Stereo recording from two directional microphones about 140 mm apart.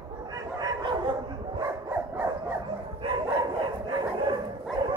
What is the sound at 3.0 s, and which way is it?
Dog, 35° right (ahead or behind).